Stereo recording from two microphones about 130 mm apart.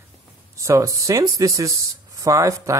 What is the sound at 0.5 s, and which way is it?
Speech, 25° right (ahead or behind).